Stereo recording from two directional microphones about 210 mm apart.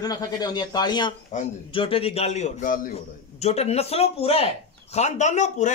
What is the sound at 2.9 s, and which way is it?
A man's voice, 30° left (ahead or behind).